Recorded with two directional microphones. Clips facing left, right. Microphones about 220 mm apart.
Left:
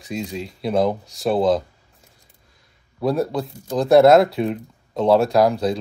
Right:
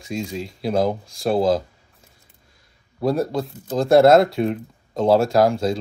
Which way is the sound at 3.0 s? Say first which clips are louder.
Even; centre (ahead or behind).